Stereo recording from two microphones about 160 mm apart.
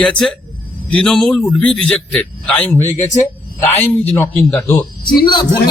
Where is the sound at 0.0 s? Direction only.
5° left (ahead or behind).